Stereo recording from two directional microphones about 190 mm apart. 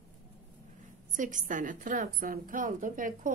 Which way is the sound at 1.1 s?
40° right (ahead or behind).